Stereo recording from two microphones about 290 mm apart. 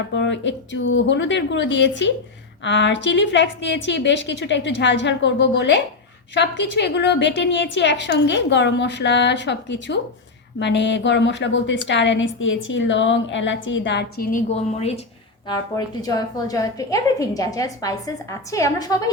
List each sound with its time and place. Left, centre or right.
0.1 s a woman's voice: left; by 19.1 s centre